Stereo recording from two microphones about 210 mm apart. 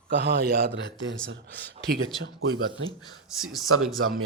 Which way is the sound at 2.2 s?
65° right (ahead or behind).